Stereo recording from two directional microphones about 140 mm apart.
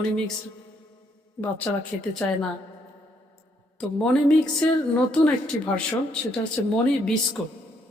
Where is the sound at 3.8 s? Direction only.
5° left (ahead or behind).